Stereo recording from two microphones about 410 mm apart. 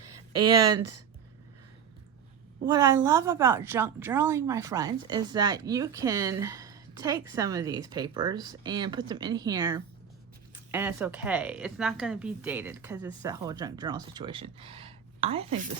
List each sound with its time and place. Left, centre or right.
0.0 s a sound: right
0.8 s speech: right
2.6 s a woman's voice: centre